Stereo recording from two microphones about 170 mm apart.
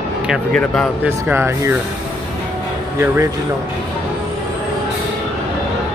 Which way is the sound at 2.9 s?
15° right (ahead or behind).